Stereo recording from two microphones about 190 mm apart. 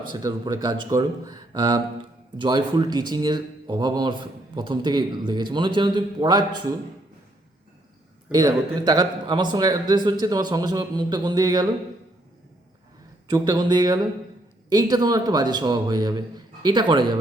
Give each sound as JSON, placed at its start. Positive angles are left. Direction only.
{"t": 0.1, "sound": "speech", "side_deg": -20}
{"t": 8.3, "sound": "speech", "side_deg": -20}
{"t": 13.3, "sound": "speech", "side_deg": -20}